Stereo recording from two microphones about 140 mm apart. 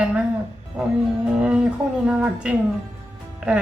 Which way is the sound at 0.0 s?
10° right (ahead or behind).